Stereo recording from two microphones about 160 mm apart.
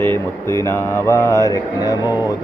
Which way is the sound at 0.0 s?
15° left (ahead or behind).